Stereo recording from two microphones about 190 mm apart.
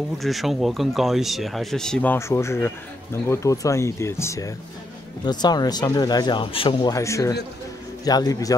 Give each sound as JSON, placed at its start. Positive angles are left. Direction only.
{"t": 0.2, "sound": "speech", "side_deg": 0}